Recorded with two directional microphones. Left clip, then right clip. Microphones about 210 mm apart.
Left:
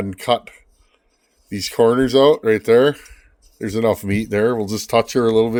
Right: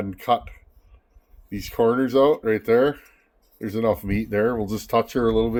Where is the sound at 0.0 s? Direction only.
45° left (ahead or behind).